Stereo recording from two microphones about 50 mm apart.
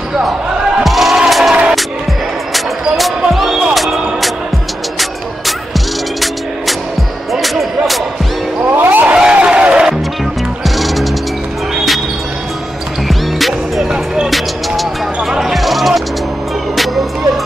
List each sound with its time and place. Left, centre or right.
0.8 s music: centre
2.5 s music: centre
7.3 s music: centre
8.6 s a sound: right
9.0 s a sound: right
10.6 s music: centre
13.1 s music: centre
14.3 s basketball bounce: centre
16.7 s music: centre